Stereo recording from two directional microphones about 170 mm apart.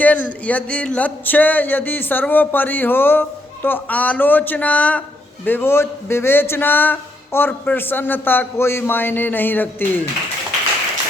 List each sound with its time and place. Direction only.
0.0 s speech: 10° left (ahead or behind)